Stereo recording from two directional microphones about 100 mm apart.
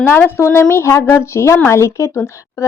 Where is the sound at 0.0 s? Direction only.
20° left (ahead or behind).